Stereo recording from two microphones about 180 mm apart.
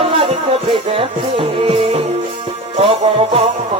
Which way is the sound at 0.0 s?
30° right (ahead or behind).